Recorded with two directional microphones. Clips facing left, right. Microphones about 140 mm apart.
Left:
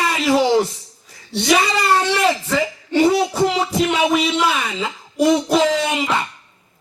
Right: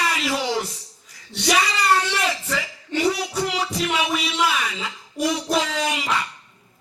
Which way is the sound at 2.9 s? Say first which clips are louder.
Left 7 dB; 30° left (ahead or behind).